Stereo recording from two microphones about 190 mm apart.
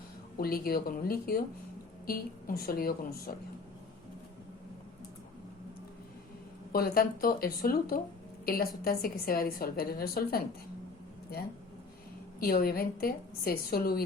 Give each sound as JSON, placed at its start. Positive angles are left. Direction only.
{"t": 0.3, "sound": "a woman's voice", "side_deg": 50}
{"t": 6.7, "sound": "a woman's voice", "side_deg": 50}
{"t": 12.4, "sound": "a woman's voice", "side_deg": 50}